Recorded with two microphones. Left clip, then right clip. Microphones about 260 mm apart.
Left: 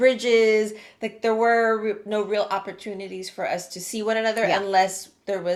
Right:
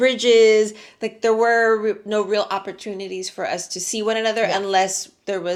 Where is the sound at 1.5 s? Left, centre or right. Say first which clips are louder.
Right 3 dB; right.